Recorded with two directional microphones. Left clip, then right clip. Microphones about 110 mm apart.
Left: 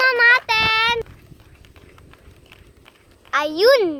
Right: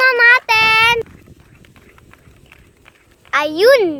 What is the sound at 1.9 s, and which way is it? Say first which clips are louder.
Vehicle: right 2 dB; 20° right (ahead or behind).